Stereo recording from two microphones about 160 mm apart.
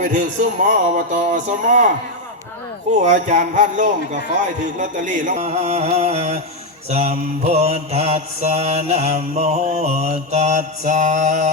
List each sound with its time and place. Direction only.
0.0 s mantra: 50° right (ahead or behind)
3.0 s mantra: 50° right (ahead or behind)